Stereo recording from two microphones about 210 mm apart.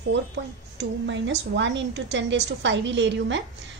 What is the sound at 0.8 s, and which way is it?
A woman's voice, 60° right (ahead or behind).